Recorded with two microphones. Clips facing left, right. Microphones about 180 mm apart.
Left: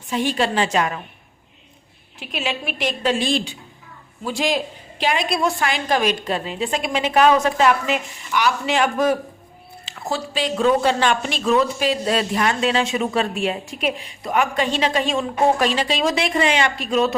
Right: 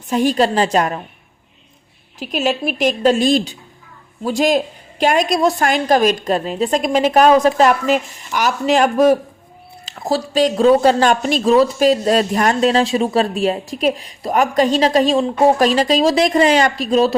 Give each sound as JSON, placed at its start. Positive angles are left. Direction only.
{"t": 0.1, "sound": "speech", "side_deg": -40}
{"t": 2.1, "sound": "speech", "side_deg": -40}